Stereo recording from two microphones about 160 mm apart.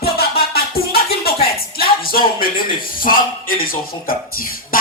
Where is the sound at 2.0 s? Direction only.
65° left (ahead or behind).